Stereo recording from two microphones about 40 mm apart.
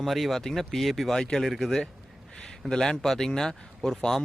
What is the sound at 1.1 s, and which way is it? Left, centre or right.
Speech, centre.